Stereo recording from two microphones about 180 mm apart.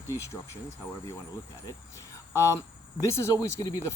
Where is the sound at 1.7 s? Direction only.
15° left (ahead or behind).